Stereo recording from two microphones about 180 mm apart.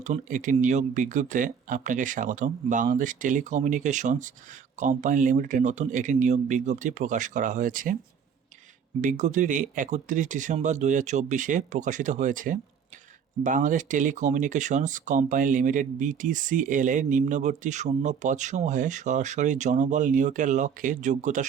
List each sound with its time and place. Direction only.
0.0 s speech: 45° right (ahead or behind)
9.0 s speech: 45° right (ahead or behind)